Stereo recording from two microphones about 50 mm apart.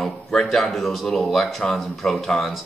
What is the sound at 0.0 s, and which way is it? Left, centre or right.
Speech, centre.